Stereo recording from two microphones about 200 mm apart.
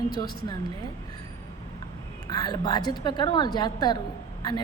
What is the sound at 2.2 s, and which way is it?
A woman's voice, 20° left (ahead or behind).